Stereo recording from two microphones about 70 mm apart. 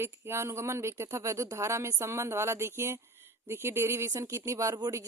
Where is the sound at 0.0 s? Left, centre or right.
Right.